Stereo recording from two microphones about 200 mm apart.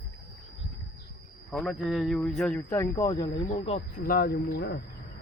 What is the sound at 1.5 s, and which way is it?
Speech, centre (ahead or behind).